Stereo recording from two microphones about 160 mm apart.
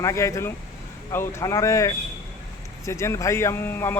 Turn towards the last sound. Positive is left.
turn(degrees=15)  # may be behind; listen again after turning